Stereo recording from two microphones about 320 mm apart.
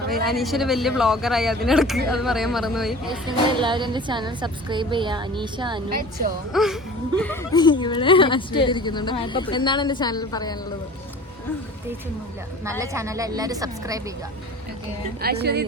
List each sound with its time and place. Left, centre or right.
0.1 s a man's voice: centre
3.1 s a woman's voice: centre
6.0 s a woman's voice: right
6.5 s a man's voice: centre
12.8 s a woman's voice: centre
15.2 s speech: right